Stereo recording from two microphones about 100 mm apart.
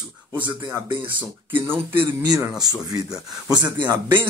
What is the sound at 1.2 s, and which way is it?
Speech, 20° right (ahead or behind).